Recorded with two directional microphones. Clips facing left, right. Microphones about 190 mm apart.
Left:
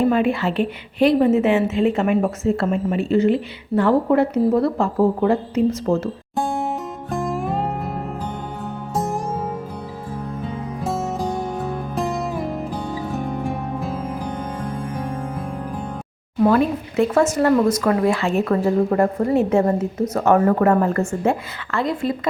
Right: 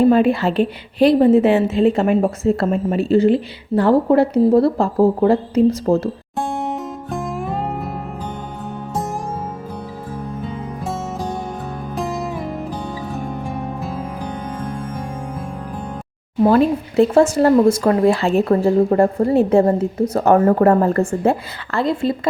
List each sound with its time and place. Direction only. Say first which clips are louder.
0.1 s a woman's voice: right 4 dB; 35° right (ahead or behind)
6.3 s music: left 2 dB; centre (ahead or behind)
10.8 s music: left 2 dB; centre (ahead or behind)
16.4 s a woman's voice: right 3 dB; 30° right (ahead or behind)